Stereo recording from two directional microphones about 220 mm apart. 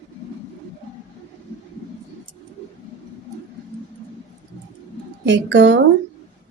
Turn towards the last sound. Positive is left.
turn(degrees=-55)  # may be behind; listen again after turning